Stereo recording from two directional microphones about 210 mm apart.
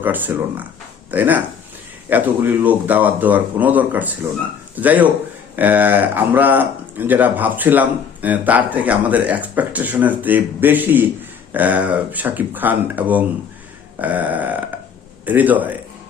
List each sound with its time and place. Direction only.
0.0 s speech: 10° right (ahead or behind)